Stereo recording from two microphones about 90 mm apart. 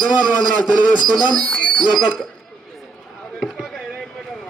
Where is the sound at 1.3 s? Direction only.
5° left (ahead or behind).